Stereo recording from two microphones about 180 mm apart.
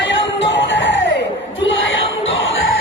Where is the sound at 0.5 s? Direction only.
90° left.